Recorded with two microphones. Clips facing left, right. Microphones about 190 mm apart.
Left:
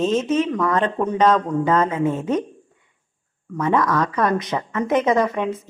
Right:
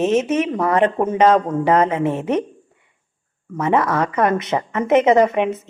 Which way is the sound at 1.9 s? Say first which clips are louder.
Right 1 dB; 75° right (ahead or behind).